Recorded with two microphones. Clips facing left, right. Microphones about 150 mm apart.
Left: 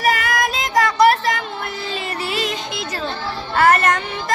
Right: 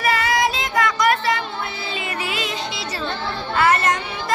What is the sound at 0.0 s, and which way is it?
Child singing, 50° left (ahead or behind).